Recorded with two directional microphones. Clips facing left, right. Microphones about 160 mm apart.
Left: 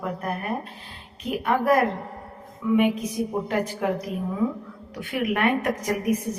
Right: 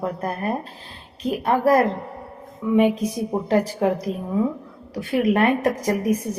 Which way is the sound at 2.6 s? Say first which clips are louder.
Right 3 dB; 25° right (ahead or behind).